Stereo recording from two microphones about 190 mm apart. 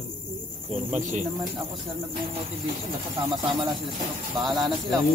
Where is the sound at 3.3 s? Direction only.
25° right (ahead or behind).